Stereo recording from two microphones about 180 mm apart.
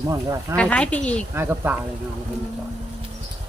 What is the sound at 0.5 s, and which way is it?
Speech, 5° left (ahead or behind).